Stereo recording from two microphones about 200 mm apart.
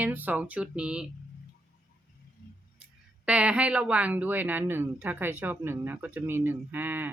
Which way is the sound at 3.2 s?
5° right (ahead or behind).